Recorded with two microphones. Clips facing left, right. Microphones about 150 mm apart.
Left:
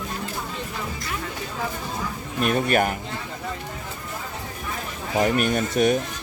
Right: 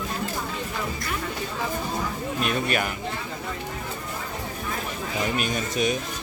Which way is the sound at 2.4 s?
45° left (ahead or behind).